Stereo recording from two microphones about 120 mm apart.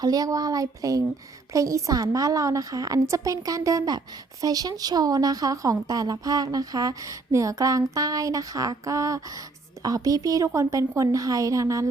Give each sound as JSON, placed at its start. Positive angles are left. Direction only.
{"t": 0.0, "sound": "a woman's voice", "side_deg": -30}